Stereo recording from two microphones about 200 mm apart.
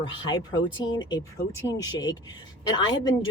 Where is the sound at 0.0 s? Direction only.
20° left (ahead or behind).